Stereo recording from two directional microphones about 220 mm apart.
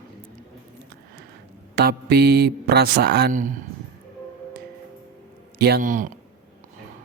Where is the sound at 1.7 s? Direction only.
45° right (ahead or behind).